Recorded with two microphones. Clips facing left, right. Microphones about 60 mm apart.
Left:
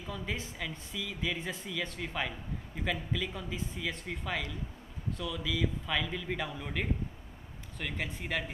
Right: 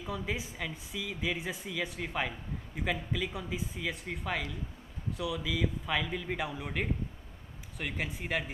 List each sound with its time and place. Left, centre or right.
0.0 s speech: centre